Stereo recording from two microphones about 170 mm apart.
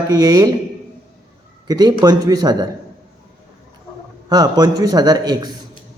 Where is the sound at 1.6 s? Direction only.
25° right (ahead or behind).